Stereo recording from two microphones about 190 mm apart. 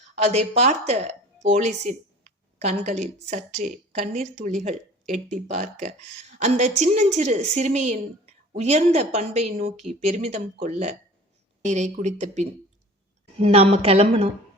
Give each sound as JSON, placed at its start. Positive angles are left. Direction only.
{"t": 0.3, "sound": "a woman's voice", "side_deg": -35}